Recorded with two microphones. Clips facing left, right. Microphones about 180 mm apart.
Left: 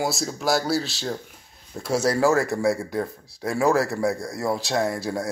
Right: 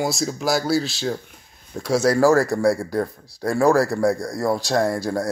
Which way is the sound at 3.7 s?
30° right (ahead or behind).